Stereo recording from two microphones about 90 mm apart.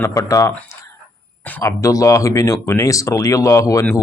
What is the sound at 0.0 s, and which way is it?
A man's voice, 40° left (ahead or behind).